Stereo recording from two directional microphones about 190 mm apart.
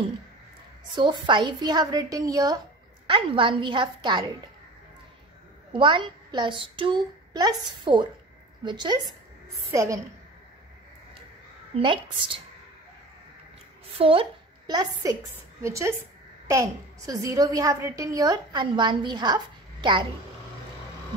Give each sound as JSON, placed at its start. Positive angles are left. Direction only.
{"t": 0.9, "sound": "a woman's voice", "side_deg": -25}
{"t": 5.7, "sound": "a woman's voice", "side_deg": -25}
{"t": 13.9, "sound": "a woman's voice", "side_deg": -30}